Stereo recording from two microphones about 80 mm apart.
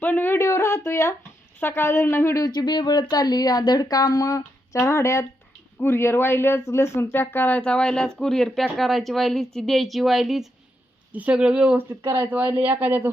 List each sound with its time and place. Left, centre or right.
0.0 s speech: left
0.3 s speech: left
2.4 s speech: left
4.8 s speech: left
7.6 s speech: centre
11.1 s speech: centre
11.8 s speech: right